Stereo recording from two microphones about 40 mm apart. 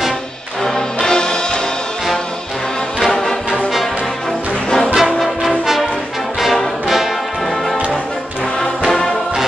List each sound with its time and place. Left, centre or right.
0.7 s music: centre
3.0 s music: centre
4.6 s music: centre
4.9 s music: centre
6.4 s brass instrument: centre